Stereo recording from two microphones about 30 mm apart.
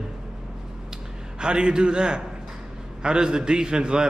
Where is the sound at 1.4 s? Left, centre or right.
Right.